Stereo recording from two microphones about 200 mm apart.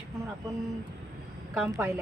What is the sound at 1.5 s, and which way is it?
Speech, 10° right (ahead or behind).